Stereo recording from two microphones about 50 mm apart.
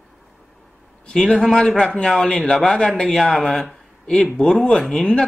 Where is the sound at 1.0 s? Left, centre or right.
Centre.